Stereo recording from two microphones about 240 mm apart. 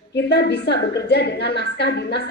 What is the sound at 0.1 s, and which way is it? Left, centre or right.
A woman's voice, left.